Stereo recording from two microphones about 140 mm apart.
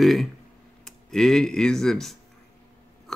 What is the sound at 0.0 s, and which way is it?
Speech, centre (ahead or behind).